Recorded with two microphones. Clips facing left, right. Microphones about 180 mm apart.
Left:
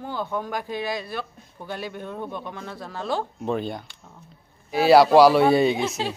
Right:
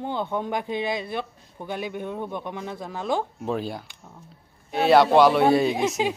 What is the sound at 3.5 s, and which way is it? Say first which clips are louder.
A man's voice: left 4 dB; 5° right (ahead or behind).